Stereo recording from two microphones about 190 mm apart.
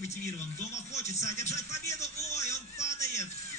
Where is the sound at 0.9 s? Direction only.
35° left (ahead or behind).